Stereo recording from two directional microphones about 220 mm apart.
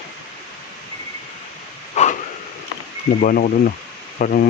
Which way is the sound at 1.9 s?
30° left (ahead or behind).